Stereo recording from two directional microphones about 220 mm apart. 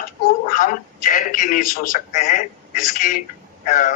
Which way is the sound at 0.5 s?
35° left (ahead or behind).